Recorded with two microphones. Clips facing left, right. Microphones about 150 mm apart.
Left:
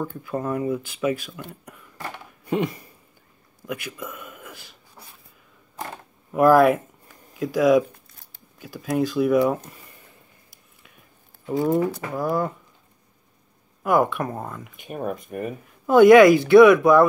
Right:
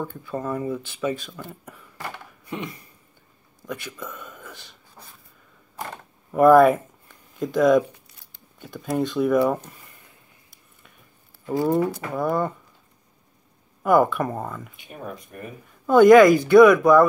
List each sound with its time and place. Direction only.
0.3 s speech: 15° left (ahead or behind)
3.6 s a sound: 10° left (ahead or behind)
6.3 s speech: 5° left (ahead or behind)
11.4 s speech: centre (ahead or behind)
13.8 s speech: centre (ahead or behind)
14.8 s speech: 50° left (ahead or behind)
15.9 s speech: 5° left (ahead or behind)